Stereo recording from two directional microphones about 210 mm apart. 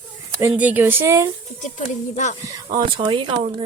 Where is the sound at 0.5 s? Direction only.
10° right (ahead or behind).